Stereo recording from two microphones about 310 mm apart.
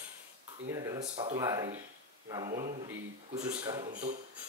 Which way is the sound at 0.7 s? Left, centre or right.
Centre.